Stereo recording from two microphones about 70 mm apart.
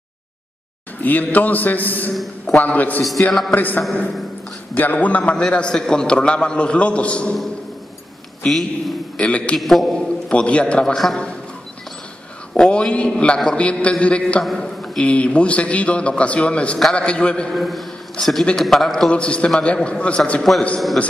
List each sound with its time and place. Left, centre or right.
1.0 s a man's voice: left
8.5 s a man's voice: centre
9.2 s a man's voice: centre
9.6 s a man's voice: centre
9.9 s a man's voice: centre
12.5 s a man's voice: centre
14.4 s a man's voice: centre
17.5 s a man's voice: centre
19.0 s a man's voice: centre